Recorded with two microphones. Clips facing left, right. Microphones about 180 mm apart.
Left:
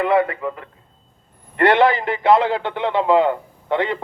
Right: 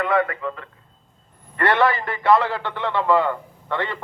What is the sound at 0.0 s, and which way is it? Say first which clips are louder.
A man's voice: left 4 dB; 25° left (ahead or behind).